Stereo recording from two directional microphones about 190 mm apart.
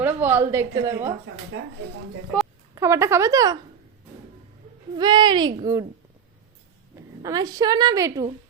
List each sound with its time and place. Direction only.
0.0 s a woman's voice: 10° right (ahead or behind)
1.5 s speech: 80° right
2.7 s speech: 15° right (ahead or behind)
4.9 s a woman's voice: 25° right (ahead or behind)
7.2 s a woman's voice: 20° right (ahead or behind)